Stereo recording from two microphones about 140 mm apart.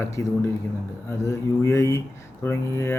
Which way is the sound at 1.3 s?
20° left (ahead or behind).